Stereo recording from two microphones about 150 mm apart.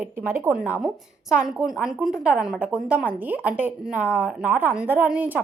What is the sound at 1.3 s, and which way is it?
Speech, 5° right (ahead or behind).